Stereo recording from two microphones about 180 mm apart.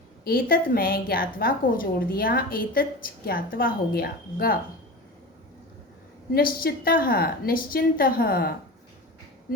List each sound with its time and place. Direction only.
0.3 s a woman's voice: 55° left (ahead or behind)
6.3 s a woman's voice: 55° left (ahead or behind)